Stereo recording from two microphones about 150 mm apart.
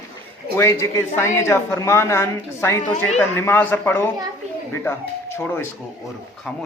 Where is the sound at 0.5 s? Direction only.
20° left (ahead or behind).